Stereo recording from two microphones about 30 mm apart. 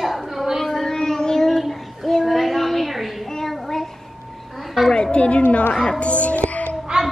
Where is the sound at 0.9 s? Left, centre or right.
Centre.